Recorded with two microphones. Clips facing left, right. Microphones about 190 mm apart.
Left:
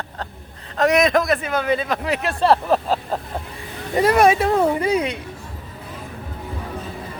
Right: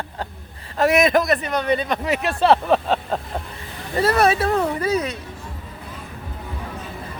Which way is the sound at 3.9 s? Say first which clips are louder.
Left 3 dB; 15° left (ahead or behind).